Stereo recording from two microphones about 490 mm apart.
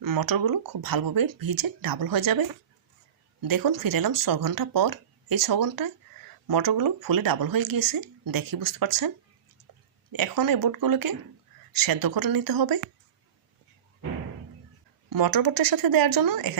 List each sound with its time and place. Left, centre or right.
0.0 s speech: right
15.1 s speech: right